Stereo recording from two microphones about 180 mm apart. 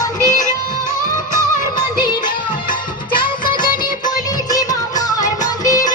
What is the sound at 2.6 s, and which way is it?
Music, 50° left (ahead or behind).